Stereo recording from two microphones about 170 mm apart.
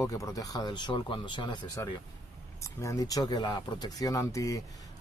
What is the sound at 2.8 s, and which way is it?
Speech, 20° left (ahead or behind).